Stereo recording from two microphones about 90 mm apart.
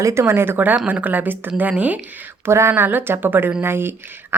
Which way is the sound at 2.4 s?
30° right (ahead or behind).